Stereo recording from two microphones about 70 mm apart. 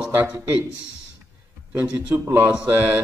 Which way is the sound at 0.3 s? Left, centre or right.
Centre.